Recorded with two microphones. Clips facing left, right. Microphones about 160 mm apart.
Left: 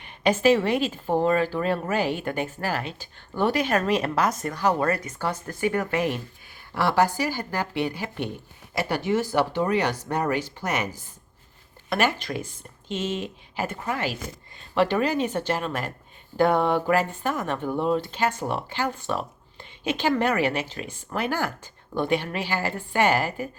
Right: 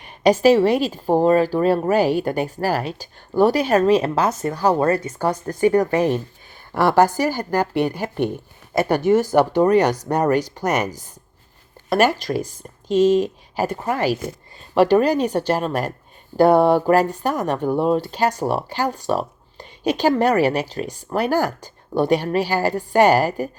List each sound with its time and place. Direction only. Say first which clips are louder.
0.0 s speech: right 6 dB; 35° right (ahead or behind)